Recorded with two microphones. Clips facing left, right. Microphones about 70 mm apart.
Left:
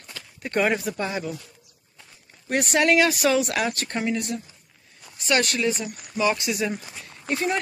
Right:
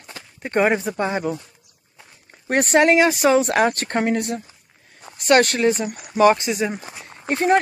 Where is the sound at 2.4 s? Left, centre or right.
Right.